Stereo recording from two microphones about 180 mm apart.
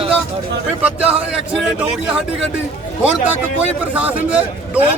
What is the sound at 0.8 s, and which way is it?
A man's voice, 5° right (ahead or behind).